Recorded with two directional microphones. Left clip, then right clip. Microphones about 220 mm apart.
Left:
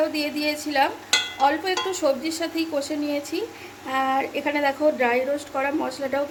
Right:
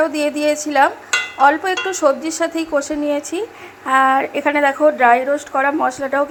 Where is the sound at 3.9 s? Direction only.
10° right (ahead or behind).